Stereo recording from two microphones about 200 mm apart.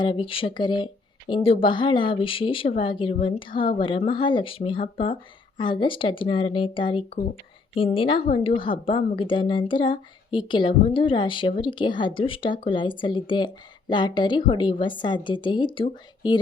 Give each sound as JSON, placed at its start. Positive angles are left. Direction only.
{"t": 0.0, "sound": "a woman's voice", "side_deg": 25}